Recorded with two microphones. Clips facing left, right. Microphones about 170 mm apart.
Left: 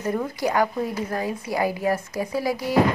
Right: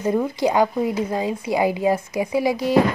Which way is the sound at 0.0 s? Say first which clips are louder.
Right 5 dB; 20° right (ahead or behind).